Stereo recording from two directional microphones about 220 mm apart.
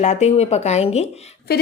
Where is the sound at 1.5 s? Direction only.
45° left (ahead or behind).